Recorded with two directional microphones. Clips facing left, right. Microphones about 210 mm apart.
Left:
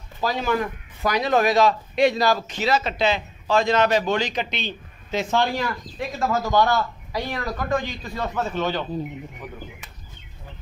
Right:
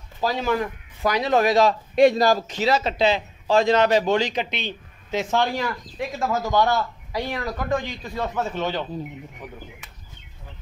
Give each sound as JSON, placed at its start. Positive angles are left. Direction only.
{"t": 0.2, "sound": "a man's voice", "side_deg": -30}
{"t": 2.0, "sound": "a man's voice", "side_deg": -50}